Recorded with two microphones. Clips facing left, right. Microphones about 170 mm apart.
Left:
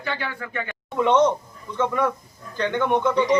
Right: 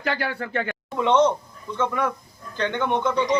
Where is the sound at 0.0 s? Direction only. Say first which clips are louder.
Right 3 dB; 70° right (ahead or behind).